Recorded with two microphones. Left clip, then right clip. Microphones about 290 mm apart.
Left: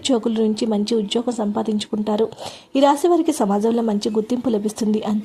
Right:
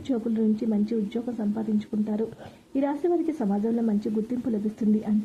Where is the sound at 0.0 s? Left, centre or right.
Centre.